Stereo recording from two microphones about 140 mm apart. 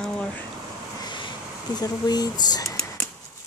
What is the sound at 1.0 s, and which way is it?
Vehicle, 35° left (ahead or behind).